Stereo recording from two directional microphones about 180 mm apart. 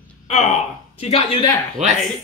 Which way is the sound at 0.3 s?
35° left (ahead or behind).